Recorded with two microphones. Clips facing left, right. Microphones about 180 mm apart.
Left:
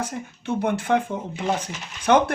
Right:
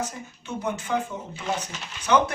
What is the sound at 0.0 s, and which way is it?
Speech, 60° left (ahead or behind).